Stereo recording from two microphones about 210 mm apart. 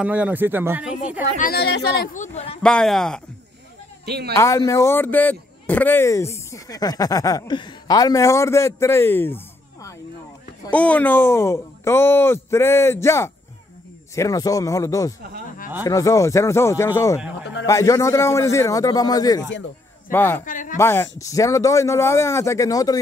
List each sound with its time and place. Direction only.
0.0 s speech: 5° right (ahead or behind)
1.4 s speech: 50° left (ahead or behind)
2.1 s speech: 35° left (ahead or behind)
2.6 s speech: 5° left (ahead or behind)
4.0 s speech: 50° right (ahead or behind)
4.4 s speech: 15° left (ahead or behind)
10.7 s speech: 5° left (ahead or behind)
20.4 s speech: 40° left (ahead or behind)
20.7 s speech: 10° left (ahead or behind)